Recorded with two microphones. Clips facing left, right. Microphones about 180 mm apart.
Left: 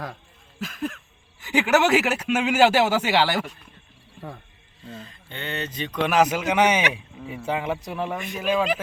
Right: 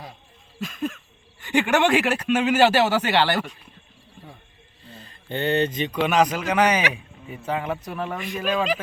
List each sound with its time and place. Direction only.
0.6 s a sound: centre (ahead or behind)
1.4 s speech: 5° left (ahead or behind)
5.3 s speech: 35° right (ahead or behind)
5.8 s a man's voice: 10° right (ahead or behind)
6.1 s speech: 5° left (ahead or behind)